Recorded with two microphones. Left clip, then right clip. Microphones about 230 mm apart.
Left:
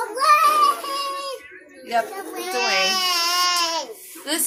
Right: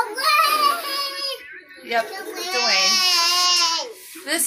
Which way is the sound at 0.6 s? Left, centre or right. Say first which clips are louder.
Even; centre.